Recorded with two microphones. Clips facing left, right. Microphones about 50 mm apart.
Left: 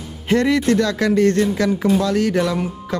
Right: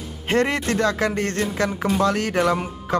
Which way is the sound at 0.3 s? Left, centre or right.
Right.